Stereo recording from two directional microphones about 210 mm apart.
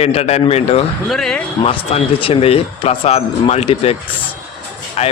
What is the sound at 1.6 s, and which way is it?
Speech, 25° left (ahead or behind).